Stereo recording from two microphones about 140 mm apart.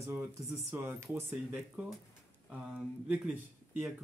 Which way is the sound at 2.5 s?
5° right (ahead or behind).